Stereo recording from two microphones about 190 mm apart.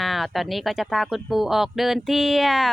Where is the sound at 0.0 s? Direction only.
Centre (ahead or behind).